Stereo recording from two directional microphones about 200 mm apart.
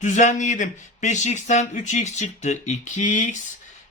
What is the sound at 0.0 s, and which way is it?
Speech, 40° left (ahead or behind).